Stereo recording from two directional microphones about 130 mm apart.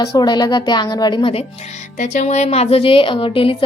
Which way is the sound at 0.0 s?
35° left (ahead or behind).